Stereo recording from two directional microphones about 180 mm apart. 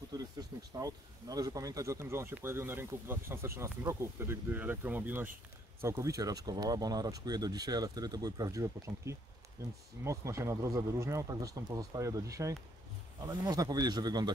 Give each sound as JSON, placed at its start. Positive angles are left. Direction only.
{"t": 0.1, "sound": "speech", "side_deg": -20}